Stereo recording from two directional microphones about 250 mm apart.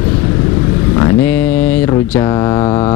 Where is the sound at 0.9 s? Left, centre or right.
Centre.